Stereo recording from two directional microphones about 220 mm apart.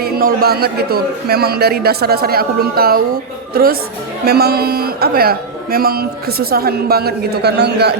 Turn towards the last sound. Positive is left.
turn(degrees=-50)  # may be behind; listen again after turning